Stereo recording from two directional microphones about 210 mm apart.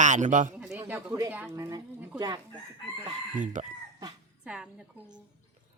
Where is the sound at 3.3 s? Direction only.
40° right (ahead or behind).